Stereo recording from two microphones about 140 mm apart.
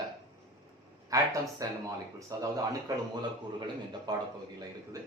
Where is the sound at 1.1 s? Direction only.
25° right (ahead or behind).